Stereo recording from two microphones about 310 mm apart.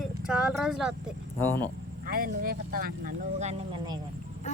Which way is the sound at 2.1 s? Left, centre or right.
Right.